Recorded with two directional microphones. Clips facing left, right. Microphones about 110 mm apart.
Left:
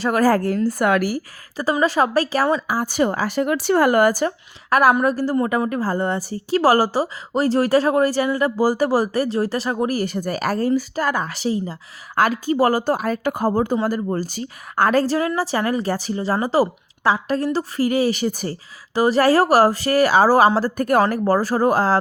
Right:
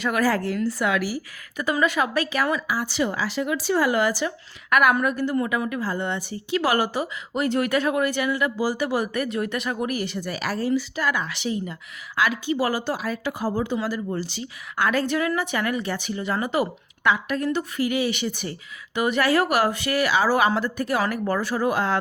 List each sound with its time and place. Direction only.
0.0 s speech: 40° left (ahead or behind)
1.5 s a woman's voice: 30° left (ahead or behind)
2.7 s speech: 45° left (ahead or behind)
4.7 s a woman's voice: 35° left (ahead or behind)
12.1 s a woman's voice: 45° left (ahead or behind)